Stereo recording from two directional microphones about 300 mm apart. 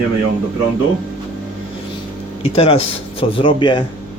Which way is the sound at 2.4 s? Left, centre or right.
Centre.